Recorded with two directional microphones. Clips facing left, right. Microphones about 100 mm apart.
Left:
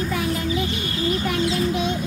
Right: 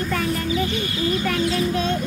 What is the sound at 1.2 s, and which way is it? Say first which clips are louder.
Speech: even; 15° left (ahead or behind).